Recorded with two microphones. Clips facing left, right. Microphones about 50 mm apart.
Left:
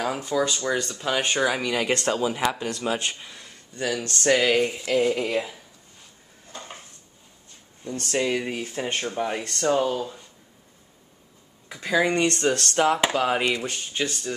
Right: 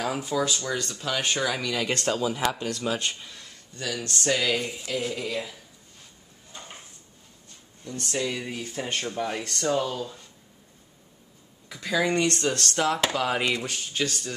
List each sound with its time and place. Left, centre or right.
0.4 s speech: centre
3.8 s speech: left
4.1 s speech: left
7.8 s speech: left; by 10.2 s centre
11.7 s speech: centre